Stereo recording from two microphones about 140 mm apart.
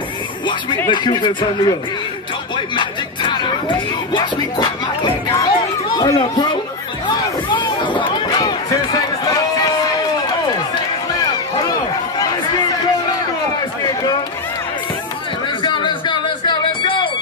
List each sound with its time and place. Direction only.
0.8 s speech: 35° left (ahead or behind)
7.1 s a sound: 35° left (ahead or behind)
15.6 s music: 35° left (ahead or behind)